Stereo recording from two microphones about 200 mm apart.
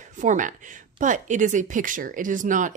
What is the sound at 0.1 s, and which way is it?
Speech, 40° right (ahead or behind).